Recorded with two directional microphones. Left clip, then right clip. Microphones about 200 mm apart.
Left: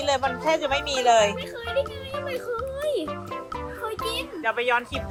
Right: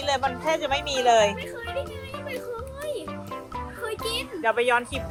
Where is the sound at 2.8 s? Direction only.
50° left (ahead or behind).